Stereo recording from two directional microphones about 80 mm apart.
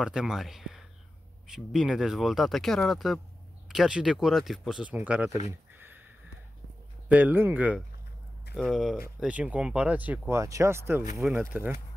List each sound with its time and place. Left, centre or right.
0.0 s speech: centre
4.9 s speech: centre
5.8 s a sound: right
7.1 s speech: right
8.5 s speech: centre
9.2 s speech: centre
10.3 s speech: right
11.2 s speech: right